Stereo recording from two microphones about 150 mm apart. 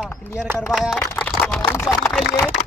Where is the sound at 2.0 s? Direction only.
Centre (ahead or behind).